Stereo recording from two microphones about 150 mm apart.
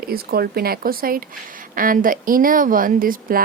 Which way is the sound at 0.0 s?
90° right.